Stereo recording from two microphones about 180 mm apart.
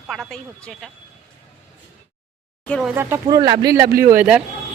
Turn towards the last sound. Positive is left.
turn(degrees=-10)  # may be behind; listen again after turning